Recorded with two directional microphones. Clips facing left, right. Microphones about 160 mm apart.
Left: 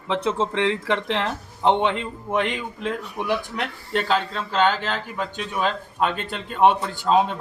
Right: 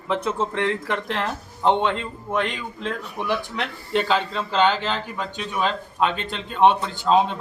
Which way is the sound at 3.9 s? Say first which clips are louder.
Right 1 dB; centre (ahead or behind).